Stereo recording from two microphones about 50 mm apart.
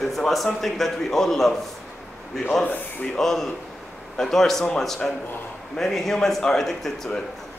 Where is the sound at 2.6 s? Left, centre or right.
Left.